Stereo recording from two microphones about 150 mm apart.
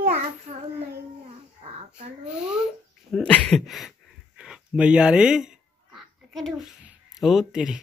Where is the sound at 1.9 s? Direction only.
5° right (ahead or behind).